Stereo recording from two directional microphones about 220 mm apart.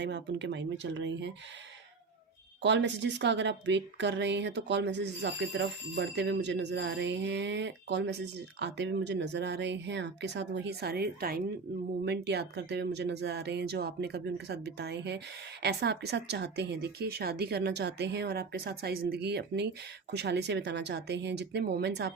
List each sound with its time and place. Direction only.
0.0 s a woman's voice: 50° right (ahead or behind)
2.6 s a woman's voice: 50° right (ahead or behind)